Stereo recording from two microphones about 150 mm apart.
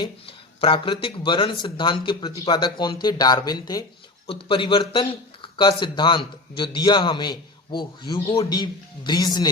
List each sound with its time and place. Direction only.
0.0 s a man's voice: 35° left (ahead or behind)